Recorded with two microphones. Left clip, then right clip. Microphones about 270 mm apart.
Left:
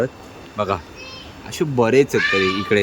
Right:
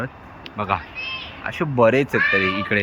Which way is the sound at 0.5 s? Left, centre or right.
Centre.